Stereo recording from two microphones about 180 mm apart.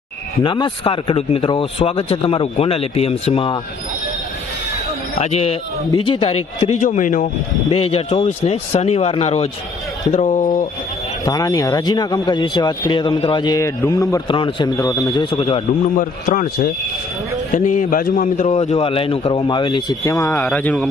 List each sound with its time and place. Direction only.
0.4 s speech: 25° left (ahead or behind)
5.1 s speech: 35° left (ahead or behind)
7.7 s speech: 35° left (ahead or behind)
11.3 s speech: 20° left (ahead or behind)
16.0 s speech: 50° left (ahead or behind); by 20.8 s 5° left (ahead or behind)